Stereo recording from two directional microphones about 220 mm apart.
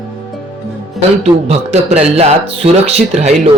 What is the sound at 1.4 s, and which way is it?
Speech, 30° right (ahead or behind).